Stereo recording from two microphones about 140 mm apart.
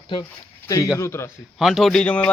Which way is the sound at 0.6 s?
25° left (ahead or behind).